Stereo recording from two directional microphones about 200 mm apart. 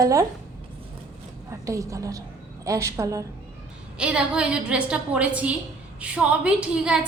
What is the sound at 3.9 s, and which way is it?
A woman's voice, 5° right (ahead or behind).